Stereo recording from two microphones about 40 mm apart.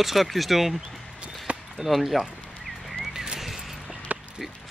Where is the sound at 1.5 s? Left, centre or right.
Right.